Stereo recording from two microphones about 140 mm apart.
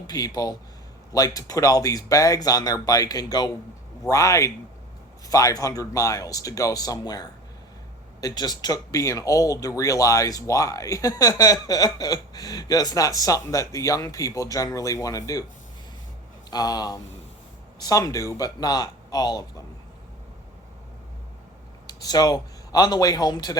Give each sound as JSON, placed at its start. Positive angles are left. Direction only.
{"t": 0.1, "sound": "speech", "side_deg": 25}
{"t": 16.5, "sound": "speech", "side_deg": 30}
{"t": 21.8, "sound": "a man's voice", "side_deg": 30}